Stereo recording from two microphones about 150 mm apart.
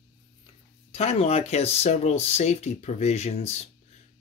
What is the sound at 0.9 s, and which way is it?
Speech, 40° left (ahead or behind).